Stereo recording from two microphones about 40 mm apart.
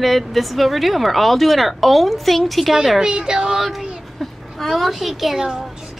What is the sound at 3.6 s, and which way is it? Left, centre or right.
Speech, centre.